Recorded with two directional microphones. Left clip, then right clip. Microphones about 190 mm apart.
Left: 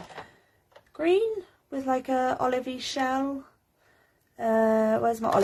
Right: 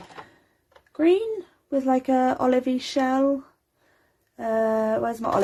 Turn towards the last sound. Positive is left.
turn(degrees=-25)  # may be behind; listen again after turning